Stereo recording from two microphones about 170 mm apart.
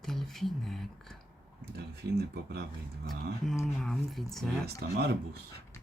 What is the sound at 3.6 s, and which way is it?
Speech, centre (ahead or behind).